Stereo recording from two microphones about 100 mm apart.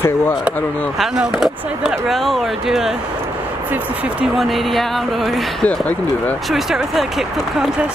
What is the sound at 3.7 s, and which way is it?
Speech, 15° right (ahead or behind).